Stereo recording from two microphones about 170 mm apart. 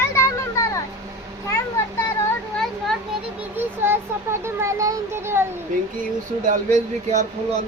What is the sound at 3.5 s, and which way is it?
A child's voice, 15° right (ahead or behind).